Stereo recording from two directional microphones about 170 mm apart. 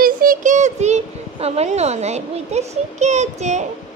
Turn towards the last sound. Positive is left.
turn(degrees=-45)  # may be behind; listen again after turning